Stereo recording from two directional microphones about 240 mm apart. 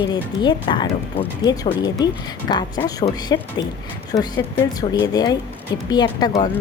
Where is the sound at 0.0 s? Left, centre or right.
Centre.